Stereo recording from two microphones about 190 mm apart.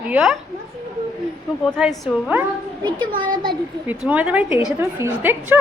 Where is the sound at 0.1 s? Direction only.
Centre (ahead or behind).